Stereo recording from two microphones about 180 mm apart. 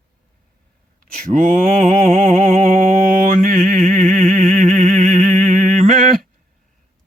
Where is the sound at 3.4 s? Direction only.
50° right (ahead or behind).